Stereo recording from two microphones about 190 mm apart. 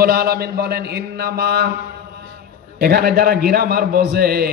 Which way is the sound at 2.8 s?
55° right (ahead or behind).